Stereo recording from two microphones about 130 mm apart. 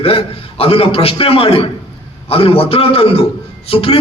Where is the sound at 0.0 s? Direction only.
45° left (ahead or behind).